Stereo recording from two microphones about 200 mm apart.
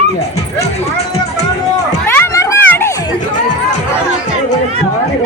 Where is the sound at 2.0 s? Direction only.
10° left (ahead or behind).